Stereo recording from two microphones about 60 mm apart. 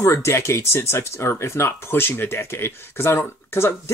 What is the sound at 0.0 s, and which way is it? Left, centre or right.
Speech, left.